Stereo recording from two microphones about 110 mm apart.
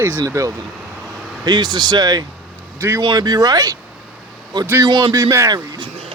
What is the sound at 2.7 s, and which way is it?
Speech, 20° right (ahead or behind).